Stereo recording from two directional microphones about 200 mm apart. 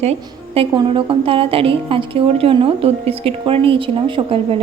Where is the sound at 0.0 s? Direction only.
30° right (ahead or behind).